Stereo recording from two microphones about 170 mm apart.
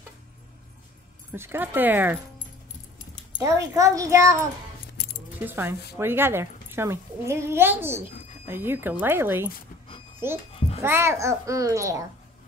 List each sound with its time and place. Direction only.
1.3 s a woman's voice: 15° right (ahead or behind)
3.3 s a child's voice: 20° right (ahead or behind)